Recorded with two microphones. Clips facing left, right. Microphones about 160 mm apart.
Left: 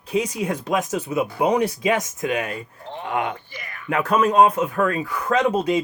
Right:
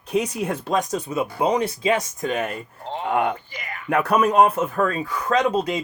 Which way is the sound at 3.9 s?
10° right (ahead or behind).